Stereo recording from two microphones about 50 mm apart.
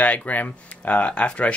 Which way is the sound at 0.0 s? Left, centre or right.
Left.